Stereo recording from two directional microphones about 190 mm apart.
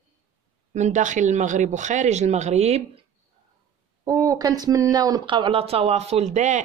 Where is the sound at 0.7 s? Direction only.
40° right (ahead or behind).